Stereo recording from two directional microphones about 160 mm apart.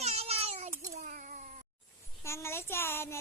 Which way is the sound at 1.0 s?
55° right (ahead or behind).